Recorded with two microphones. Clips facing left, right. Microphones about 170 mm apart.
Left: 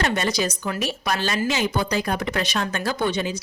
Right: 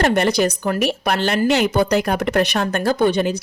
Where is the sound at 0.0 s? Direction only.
60° right (ahead or behind).